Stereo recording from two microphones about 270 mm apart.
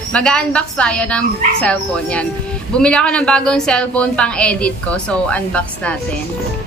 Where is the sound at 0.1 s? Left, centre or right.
Centre.